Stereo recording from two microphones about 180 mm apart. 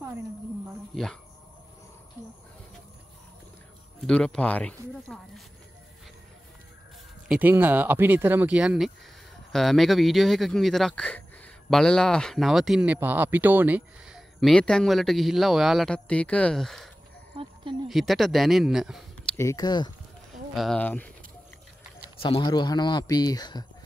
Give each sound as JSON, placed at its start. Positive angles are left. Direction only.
{"t": 4.0, "sound": "speech", "side_deg": 5}
{"t": 7.2, "sound": "speech", "side_deg": -10}
{"t": 17.3, "sound": "speech", "side_deg": -30}
{"t": 17.8, "sound": "speech", "side_deg": 0}
{"t": 19.3, "sound": "a man's voice", "side_deg": 20}
{"t": 20.5, "sound": "speech", "side_deg": 5}
{"t": 22.2, "sound": "a man's voice", "side_deg": 30}